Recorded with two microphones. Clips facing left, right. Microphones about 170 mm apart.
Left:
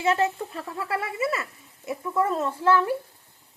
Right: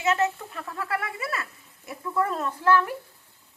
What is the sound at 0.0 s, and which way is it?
A woman's voice, 30° left (ahead or behind).